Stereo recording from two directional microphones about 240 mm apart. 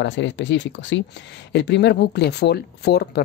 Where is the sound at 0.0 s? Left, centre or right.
Left.